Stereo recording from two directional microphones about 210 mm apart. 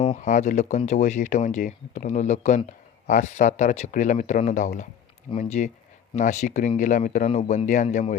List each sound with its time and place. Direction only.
0.0 s speech: 30° left (ahead or behind)